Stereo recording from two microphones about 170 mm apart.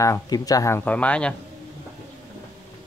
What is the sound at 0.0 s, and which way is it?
Speech, 20° left (ahead or behind).